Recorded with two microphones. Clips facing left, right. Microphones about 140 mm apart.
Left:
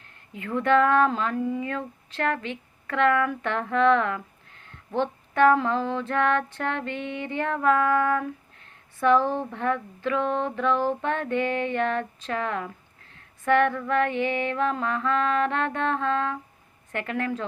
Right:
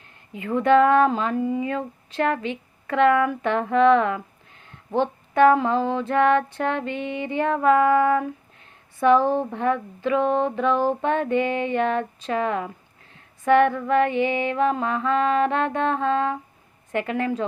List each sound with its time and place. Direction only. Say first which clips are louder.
0.3 s speech: right 4 dB; 15° right (ahead or behind)